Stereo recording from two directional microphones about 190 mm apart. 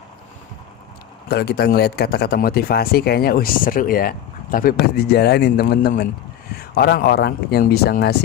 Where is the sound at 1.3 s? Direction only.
55° left (ahead or behind).